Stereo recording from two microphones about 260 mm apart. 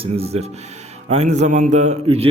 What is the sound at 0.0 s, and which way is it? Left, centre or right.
A man's voice, right.